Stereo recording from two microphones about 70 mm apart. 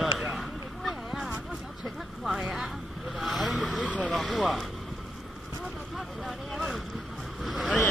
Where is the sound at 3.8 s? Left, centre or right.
Centre.